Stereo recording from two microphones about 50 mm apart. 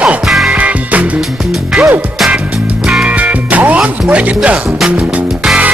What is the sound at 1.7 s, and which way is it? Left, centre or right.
Music, centre.